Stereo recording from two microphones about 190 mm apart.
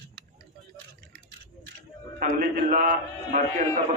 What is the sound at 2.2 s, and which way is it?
A man's voice, 45° right (ahead or behind).